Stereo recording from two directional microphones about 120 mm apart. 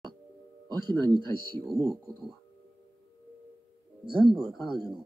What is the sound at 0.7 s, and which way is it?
Speech, 35° right (ahead or behind).